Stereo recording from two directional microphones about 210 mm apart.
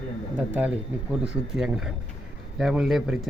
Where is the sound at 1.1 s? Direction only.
Centre (ahead or behind).